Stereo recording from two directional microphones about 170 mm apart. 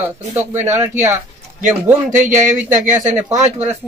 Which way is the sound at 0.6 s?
15° right (ahead or behind).